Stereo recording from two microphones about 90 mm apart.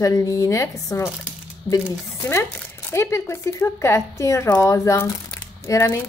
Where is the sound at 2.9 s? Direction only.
30° left (ahead or behind).